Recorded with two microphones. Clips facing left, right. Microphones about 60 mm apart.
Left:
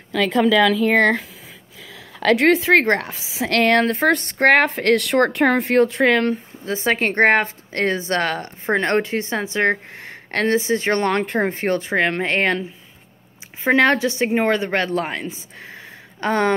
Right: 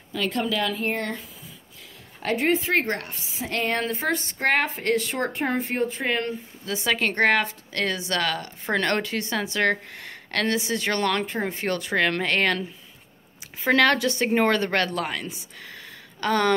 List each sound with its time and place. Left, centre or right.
0.1 s a woman's voice: left
6.6 s a woman's voice: left
13.7 s a woman's voice: left